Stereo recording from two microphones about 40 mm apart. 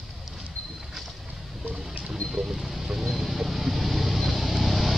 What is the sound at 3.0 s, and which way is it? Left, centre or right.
Vehicle, centre.